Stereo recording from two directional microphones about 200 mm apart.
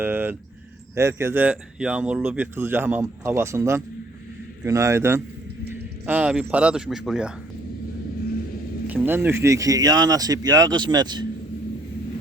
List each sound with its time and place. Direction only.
0.0 s speech: 10° right (ahead or behind)
8.9 s speech: 10° right (ahead or behind)